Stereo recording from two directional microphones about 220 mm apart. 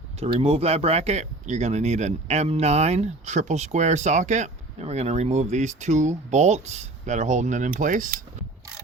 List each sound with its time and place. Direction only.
0.2 s speech: 30° right (ahead or behind)